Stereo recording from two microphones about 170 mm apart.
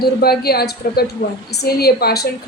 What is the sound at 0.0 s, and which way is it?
Speech, 65° left (ahead or behind).